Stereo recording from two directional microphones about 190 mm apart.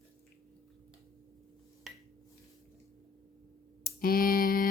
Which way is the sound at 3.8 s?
50° left (ahead or behind).